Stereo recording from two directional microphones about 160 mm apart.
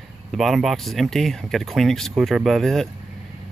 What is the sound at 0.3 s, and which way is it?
Speech, centre (ahead or behind).